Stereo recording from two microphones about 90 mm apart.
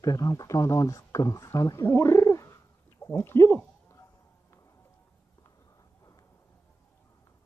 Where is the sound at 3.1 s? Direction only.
25° left (ahead or behind).